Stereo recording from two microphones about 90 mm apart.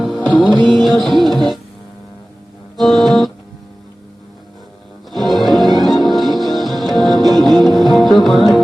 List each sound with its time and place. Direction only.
0.4 s music: 60° right (ahead or behind)
0.7 s music: centre (ahead or behind)
2.7 s music: centre (ahead or behind)
5.1 s music: centre (ahead or behind)